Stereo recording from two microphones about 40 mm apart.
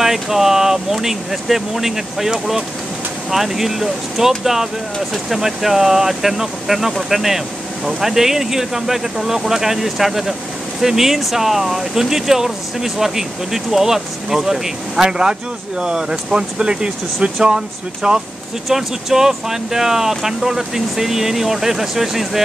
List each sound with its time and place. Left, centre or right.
0.0 s speech: centre